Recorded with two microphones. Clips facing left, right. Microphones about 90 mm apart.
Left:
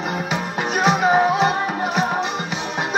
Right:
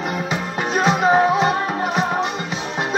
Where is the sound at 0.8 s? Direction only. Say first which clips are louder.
Right 1 dB; 20° left (ahead or behind).